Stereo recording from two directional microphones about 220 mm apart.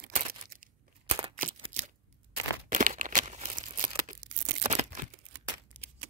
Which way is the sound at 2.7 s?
35° right (ahead or behind).